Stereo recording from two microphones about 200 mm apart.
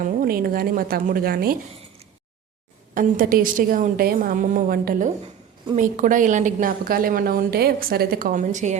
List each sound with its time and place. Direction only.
0.0 s a woman's voice: 45° right (ahead or behind)
2.9 s a woman's voice: 45° right (ahead or behind)